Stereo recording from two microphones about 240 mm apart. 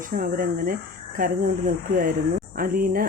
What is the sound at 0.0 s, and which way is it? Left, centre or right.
Speech, right.